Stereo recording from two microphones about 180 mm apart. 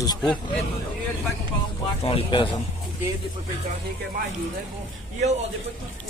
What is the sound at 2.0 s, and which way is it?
Speech, 30° left (ahead or behind).